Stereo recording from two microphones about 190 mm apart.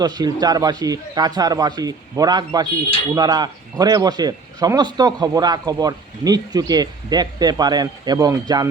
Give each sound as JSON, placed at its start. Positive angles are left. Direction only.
{"t": 0.0, "sound": "speech", "side_deg": -20}